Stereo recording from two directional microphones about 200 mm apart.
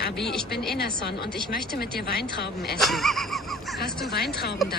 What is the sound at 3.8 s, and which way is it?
Speech, 50° left (ahead or behind).